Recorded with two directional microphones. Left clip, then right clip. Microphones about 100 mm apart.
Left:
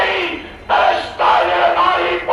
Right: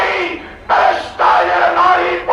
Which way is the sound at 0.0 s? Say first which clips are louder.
Right 1 dB; 15° right (ahead or behind).